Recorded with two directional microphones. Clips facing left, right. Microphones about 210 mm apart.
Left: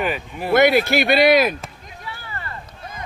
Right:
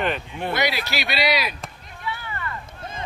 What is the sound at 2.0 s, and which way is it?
Vehicle, 35° left (ahead or behind).